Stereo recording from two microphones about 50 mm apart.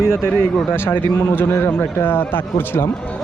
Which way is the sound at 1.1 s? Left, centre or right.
Left.